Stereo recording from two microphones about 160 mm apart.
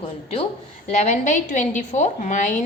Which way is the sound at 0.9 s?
50° left (ahead or behind).